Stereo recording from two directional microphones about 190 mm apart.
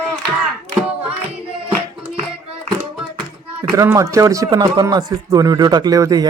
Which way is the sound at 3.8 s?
15° right (ahead or behind).